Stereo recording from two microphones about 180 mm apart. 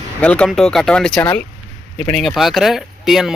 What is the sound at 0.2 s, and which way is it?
Speech, 5° left (ahead or behind).